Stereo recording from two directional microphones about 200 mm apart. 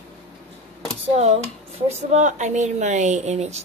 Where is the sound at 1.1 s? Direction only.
30° right (ahead or behind).